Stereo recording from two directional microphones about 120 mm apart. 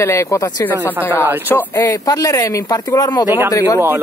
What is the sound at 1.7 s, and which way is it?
A man's voice, 30° left (ahead or behind).